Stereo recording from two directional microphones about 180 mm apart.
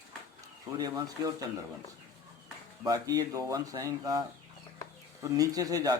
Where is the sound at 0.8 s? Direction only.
20° right (ahead or behind).